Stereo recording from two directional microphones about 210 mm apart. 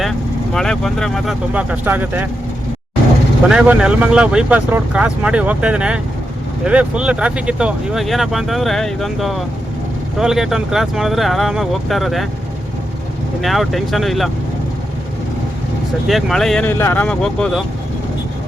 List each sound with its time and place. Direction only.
0.5 s speech: centre (ahead or behind)
3.5 s speech: 5° right (ahead or behind)
13.4 s speech: centre (ahead or behind)
16.0 s speech: centre (ahead or behind)